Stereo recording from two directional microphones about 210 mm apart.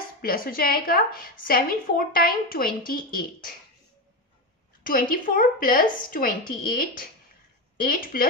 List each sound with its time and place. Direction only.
0.2 s a woman's voice: 45° left (ahead or behind)
4.8 s a woman's voice: 40° left (ahead or behind)